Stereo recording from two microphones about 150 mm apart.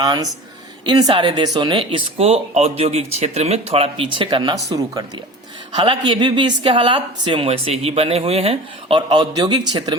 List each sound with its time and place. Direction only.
0.0 s a woman's voice: 25° right (ahead or behind)